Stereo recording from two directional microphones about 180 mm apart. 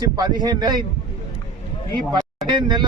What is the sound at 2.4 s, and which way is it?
Speech, 25° right (ahead or behind).